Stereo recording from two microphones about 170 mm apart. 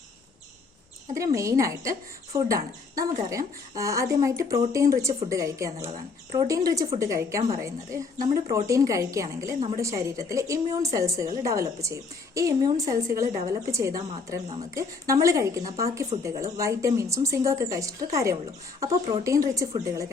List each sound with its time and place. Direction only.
1.0 s speech: 20° right (ahead or behind)